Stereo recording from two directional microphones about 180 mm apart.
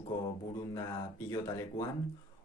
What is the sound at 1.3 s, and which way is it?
Speech, 20° left (ahead or behind).